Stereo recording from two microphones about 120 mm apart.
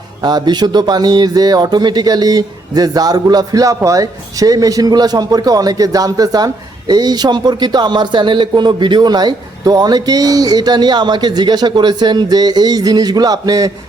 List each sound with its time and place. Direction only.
0.2 s speech: 35° right (ahead or behind)